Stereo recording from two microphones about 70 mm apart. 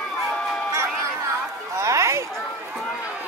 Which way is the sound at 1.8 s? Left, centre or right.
Right.